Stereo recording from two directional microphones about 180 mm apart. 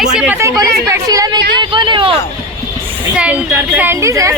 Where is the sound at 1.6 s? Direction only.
25° right (ahead or behind).